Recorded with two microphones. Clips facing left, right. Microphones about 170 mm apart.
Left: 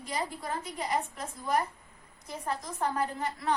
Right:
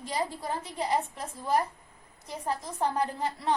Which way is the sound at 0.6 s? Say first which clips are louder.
Right 4 dB; 30° right (ahead or behind).